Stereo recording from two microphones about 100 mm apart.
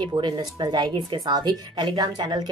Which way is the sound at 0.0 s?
45° right (ahead or behind).